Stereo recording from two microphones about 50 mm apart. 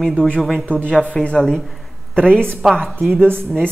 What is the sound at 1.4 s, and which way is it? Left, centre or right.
Speech, centre.